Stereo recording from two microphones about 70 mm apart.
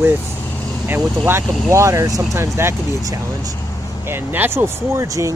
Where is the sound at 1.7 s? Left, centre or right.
Right.